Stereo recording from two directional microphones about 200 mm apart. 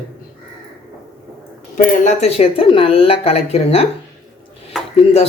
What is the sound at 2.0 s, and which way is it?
Speech, 30° left (ahead or behind).